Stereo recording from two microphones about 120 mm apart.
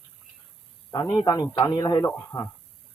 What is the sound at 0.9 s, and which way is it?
A man's voice, 30° left (ahead or behind).